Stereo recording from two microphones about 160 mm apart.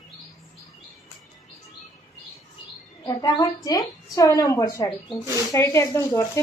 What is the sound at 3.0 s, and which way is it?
Speech, 25° left (ahead or behind).